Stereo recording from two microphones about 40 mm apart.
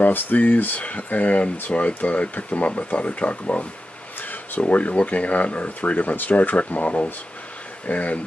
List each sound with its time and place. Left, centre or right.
0.0 s speech: left